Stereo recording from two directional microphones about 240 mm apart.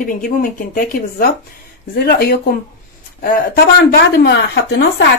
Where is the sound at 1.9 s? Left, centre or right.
Left.